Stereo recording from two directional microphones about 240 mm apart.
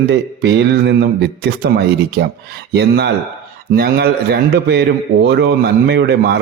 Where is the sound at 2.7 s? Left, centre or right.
Right.